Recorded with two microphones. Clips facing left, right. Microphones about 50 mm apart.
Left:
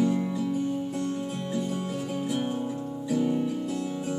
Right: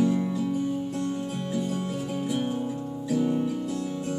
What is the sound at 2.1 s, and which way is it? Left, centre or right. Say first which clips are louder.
Music: right 1 dB; centre.